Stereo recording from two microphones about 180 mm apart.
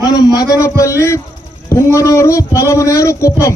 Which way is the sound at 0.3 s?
20° left (ahead or behind).